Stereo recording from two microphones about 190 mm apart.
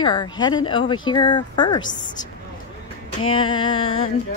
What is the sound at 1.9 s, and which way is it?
Speech, 40° left (ahead or behind).